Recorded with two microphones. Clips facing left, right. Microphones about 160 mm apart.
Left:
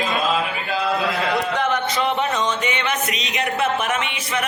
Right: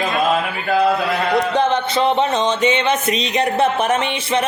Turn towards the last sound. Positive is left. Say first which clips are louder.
# right 6 dB
turn(degrees=-30)  # may be behind; listen again after turning